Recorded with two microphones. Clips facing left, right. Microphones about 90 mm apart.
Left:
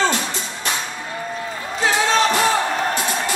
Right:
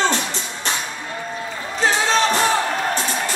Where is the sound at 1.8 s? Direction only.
35° right (ahead or behind).